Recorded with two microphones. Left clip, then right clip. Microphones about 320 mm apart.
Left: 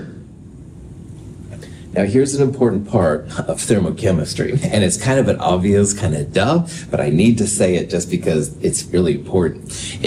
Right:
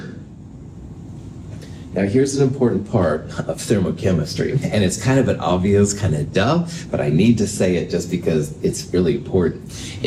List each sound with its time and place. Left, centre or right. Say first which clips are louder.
1.9 s speech: left 2 dB; left